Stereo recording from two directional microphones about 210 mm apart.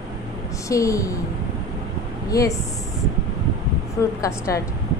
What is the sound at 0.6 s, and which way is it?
Speech, 15° left (ahead or behind).